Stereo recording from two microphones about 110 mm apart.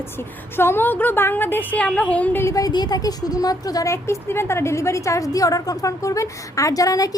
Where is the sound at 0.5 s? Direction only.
20° left (ahead or behind).